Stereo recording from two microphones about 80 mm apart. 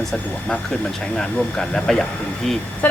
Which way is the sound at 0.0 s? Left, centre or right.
Centre.